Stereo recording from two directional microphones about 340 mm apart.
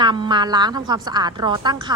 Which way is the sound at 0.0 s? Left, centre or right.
Centre.